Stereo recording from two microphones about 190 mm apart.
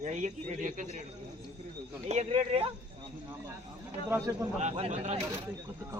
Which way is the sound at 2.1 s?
30° right (ahead or behind).